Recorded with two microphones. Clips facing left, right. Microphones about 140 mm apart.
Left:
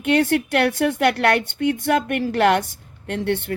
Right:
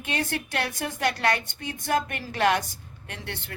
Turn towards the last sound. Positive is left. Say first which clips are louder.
# left 15 dB
turn(degrees=55)  # may be behind; listen again after turning